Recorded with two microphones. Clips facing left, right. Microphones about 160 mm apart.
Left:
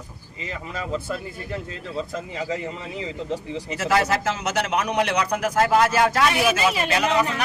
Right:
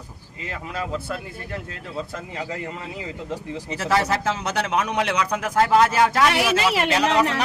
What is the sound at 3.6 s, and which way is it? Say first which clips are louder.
Speech: even; 30° right (ahead or behind).